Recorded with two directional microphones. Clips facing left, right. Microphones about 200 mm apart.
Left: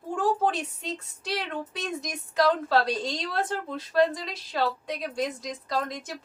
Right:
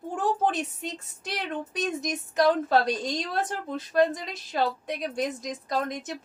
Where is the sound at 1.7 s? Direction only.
20° right (ahead or behind).